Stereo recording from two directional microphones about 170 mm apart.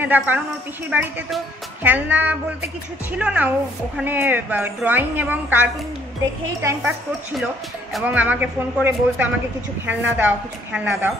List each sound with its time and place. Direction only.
0.0 s a woman's voice: 10° right (ahead or behind)
7.9 s a woman's voice: 10° right (ahead or behind)